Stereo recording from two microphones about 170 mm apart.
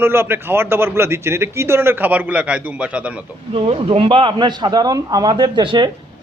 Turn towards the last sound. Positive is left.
turn(degrees=-25)  # may be behind; listen again after turning